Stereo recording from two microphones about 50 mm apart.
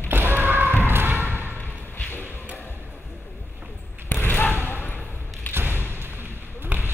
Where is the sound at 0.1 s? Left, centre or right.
Right.